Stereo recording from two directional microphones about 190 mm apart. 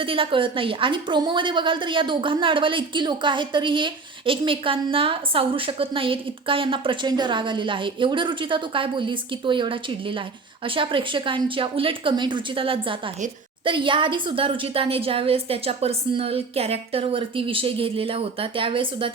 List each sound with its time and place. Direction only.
0.0 s a woman's voice: 30° right (ahead or behind)
10.8 s a woman's voice: 25° right (ahead or behind)